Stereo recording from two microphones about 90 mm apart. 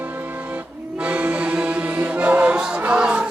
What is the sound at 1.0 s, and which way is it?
Music, 15° right (ahead or behind).